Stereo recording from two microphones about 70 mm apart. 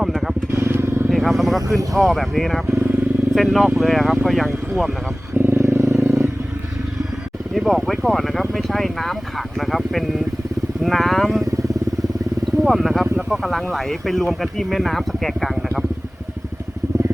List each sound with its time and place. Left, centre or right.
0.5 s vehicle: right
1.1 s speech: centre
2.6 s vehicle: right
3.3 s speech: centre
5.3 s vehicle: right
7.5 s speech: centre
12.6 s speech: centre